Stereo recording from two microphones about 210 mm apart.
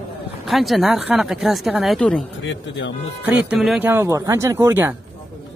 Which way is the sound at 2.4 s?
60° left (ahead or behind).